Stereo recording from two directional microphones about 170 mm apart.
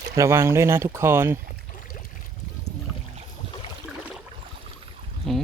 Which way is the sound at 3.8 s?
5° right (ahead or behind).